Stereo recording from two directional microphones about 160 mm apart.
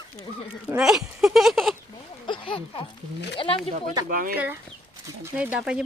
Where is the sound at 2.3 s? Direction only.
30° left (ahead or behind).